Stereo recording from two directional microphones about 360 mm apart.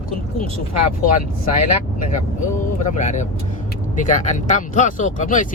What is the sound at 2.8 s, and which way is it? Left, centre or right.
Speech, centre.